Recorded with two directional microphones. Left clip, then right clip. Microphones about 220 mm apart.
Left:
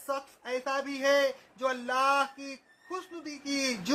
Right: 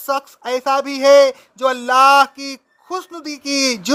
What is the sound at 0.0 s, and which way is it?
Speech, 50° right (ahead or behind).